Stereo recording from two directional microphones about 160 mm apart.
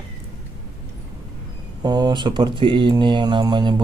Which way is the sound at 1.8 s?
25° right (ahead or behind).